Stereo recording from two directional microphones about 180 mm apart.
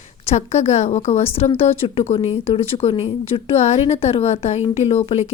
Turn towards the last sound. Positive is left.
turn(degrees=35)  # may be behind; listen again after turning